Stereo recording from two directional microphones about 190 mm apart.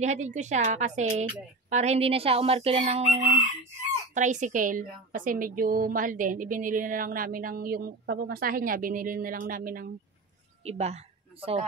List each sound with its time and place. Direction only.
0.0 s fowl: 40° right (ahead or behind)
4.1 s a woman's voice: 40° right (ahead or behind)
10.6 s a woman's voice: 35° right (ahead or behind)